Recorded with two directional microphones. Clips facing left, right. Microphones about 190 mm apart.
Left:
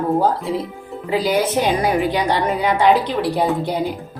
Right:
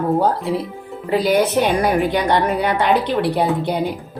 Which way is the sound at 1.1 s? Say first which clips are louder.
Right 2 dB; 60° right (ahead or behind).